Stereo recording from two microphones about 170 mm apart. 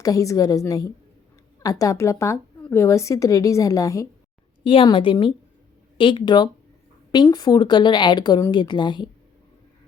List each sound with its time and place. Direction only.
0.0 s a woman's voice: 20° left (ahead or behind)
4.6 s a woman's voice: 30° left (ahead or behind)